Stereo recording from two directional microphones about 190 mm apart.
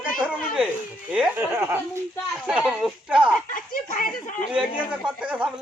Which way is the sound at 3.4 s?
45° left (ahead or behind).